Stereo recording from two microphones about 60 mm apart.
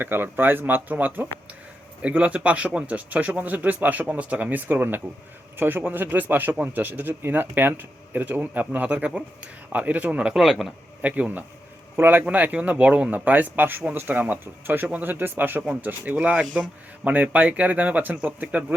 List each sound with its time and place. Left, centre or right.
0.0 s speech: right
2.0 s speech: right
10.3 s speech: centre
11.0 s speech: right
12.2 s speech: right